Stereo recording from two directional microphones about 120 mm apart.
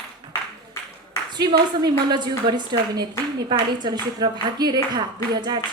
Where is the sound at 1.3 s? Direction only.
35° right (ahead or behind).